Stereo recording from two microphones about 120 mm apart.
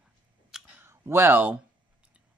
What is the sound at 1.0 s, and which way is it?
Speech, 20° right (ahead or behind).